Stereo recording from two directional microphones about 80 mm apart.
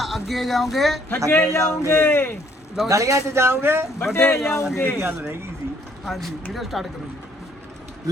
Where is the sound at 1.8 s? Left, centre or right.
Left.